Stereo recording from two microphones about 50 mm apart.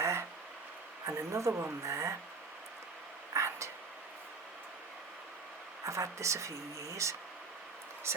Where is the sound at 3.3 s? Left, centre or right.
Right.